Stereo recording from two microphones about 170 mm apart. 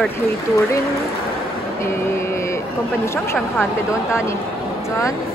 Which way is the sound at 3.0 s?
15° left (ahead or behind).